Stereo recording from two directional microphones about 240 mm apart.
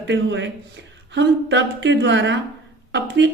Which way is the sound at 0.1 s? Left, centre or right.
Right.